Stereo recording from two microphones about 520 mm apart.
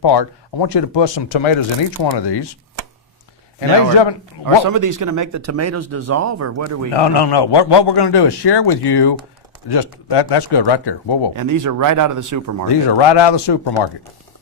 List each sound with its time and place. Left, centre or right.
0.0 s a man's voice: left
2.0 s a man's voice: left
4.4 s speech: right
6.9 s a man's voice: left
11.3 s speech: right
12.6 s a man's voice: left